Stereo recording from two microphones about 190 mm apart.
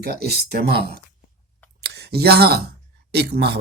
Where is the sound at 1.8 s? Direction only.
60° right (ahead or behind).